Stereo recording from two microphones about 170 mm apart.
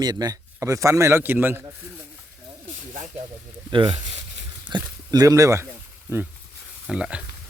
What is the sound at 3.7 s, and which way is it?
Speech, 30° right (ahead or behind).